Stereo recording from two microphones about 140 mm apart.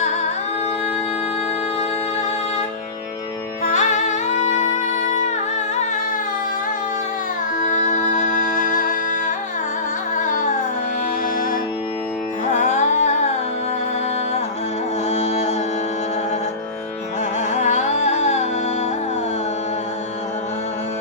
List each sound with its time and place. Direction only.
3.6 s music: 60° left (ahead or behind)
7.6 s music: 60° left (ahead or behind)
12.5 s music: 60° left (ahead or behind)
15.1 s music: 55° left (ahead or behind)
17.5 s music: 55° left (ahead or behind)